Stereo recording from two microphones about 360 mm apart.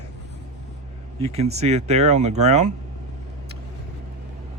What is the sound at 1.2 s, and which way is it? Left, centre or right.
Speech, centre.